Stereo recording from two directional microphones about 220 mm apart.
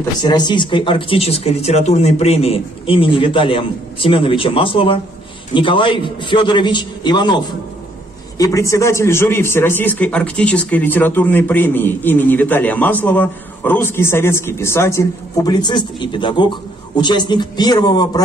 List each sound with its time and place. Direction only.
0.2 s a man's voice: 20° left (ahead or behind)